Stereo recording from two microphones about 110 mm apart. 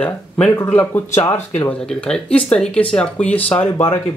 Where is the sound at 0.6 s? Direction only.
15° left (ahead or behind).